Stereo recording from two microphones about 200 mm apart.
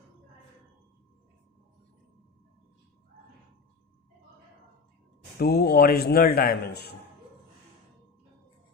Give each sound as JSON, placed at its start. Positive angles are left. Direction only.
{"t": 5.4, "sound": "a man's voice", "side_deg": 50}